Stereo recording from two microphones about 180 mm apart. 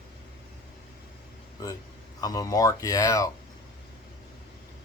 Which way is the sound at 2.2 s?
20° left (ahead or behind).